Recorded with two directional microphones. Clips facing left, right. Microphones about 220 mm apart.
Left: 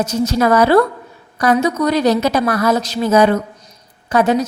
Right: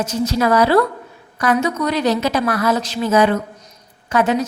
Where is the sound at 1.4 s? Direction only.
35° left (ahead or behind).